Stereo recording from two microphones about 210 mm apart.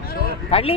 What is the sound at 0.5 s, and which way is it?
Speech, 25° left (ahead or behind).